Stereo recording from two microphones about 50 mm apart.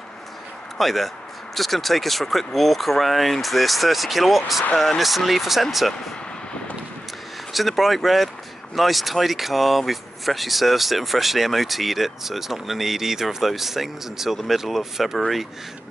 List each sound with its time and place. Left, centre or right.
0.7 s speech: centre
7.5 s speech: centre